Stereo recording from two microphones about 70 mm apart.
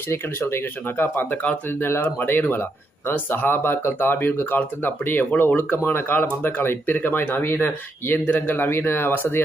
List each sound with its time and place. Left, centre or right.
0.1 s speech: left